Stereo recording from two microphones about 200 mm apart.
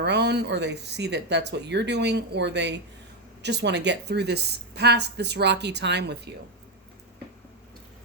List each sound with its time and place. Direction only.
0.0 s a woman's voice: 55° right (ahead or behind)